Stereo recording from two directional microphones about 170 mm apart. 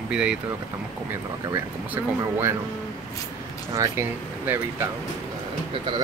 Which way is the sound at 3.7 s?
20° right (ahead or behind).